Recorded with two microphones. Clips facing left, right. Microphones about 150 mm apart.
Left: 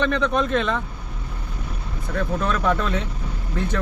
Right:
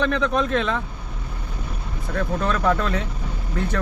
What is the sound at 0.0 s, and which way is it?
Speech, centre (ahead or behind).